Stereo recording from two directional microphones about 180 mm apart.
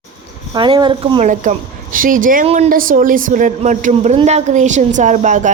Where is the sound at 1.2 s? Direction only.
45° right (ahead or behind).